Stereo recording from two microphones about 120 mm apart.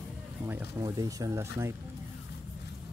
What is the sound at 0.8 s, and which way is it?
Speech, 30° right (ahead or behind).